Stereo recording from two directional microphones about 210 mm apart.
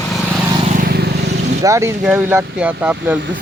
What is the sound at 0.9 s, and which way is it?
Vehicle, 50° right (ahead or behind).